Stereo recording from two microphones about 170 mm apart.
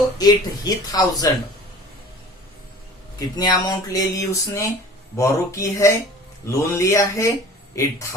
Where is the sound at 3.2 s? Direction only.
25° left (ahead or behind).